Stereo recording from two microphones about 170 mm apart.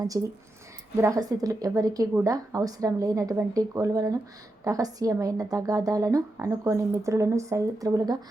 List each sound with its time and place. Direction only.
0.1 s a woman's voice: 20° right (ahead or behind)